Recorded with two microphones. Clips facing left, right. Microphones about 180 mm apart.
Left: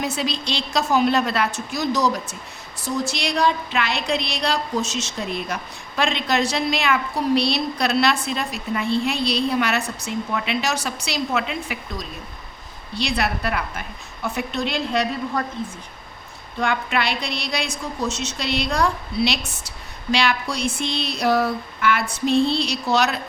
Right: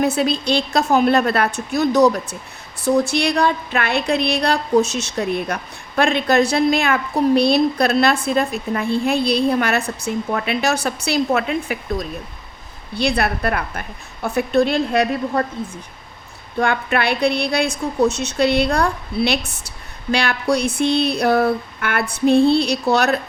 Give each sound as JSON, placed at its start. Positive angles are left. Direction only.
{"t": 0.2, "sound": "a woman's voice", "side_deg": -55}
{"t": 16.6, "sound": "a woman's voice", "side_deg": -55}